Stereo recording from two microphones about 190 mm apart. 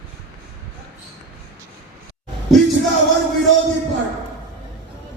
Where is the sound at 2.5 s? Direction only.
Centre (ahead or behind).